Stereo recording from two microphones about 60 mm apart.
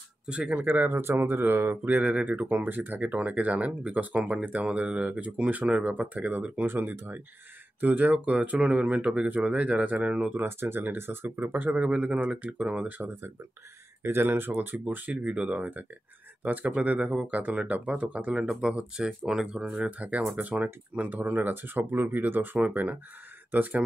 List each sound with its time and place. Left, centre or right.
0.3 s speech: centre
0.6 s speech: right; by 10.3 s centre
10.3 s speech: right
11.7 s speech: centre
14.0 s speech: right
15.2 s speech: centre